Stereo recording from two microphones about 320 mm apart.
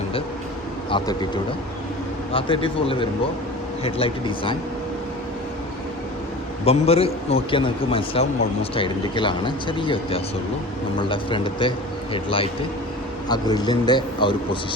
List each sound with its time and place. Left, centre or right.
0.9 s speech: centre
2.3 s speech: centre
6.7 s speech: centre